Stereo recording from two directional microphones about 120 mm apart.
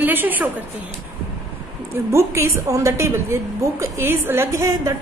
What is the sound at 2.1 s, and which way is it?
A woman's voice, 20° right (ahead or behind).